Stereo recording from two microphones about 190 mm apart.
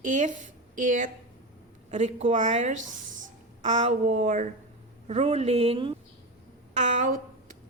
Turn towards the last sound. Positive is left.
turn(degrees=-45)  # may be behind; listen again after turning